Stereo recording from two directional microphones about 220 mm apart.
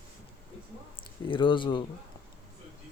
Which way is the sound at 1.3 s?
20° left (ahead or behind).